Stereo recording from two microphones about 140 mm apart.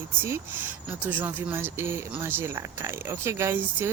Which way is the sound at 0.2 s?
15° right (ahead or behind).